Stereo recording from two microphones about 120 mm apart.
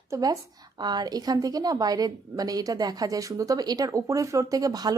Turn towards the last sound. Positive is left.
turn(degrees=-30)  # may be behind; listen again after turning